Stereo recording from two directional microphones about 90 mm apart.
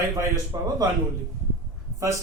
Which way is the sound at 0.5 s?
45° right (ahead or behind).